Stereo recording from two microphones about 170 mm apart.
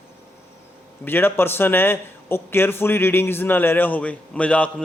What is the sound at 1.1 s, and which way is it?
A man's voice, 10° left (ahead or behind).